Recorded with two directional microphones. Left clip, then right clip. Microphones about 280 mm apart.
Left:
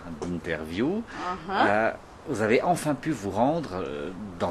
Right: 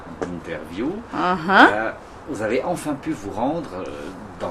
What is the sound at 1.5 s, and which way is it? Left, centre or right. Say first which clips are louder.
Speech: right 12 dB; right.